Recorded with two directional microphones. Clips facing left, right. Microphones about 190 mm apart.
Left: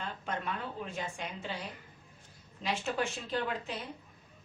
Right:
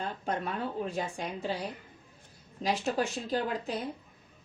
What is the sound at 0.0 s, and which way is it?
Speech, 35° right (ahead or behind).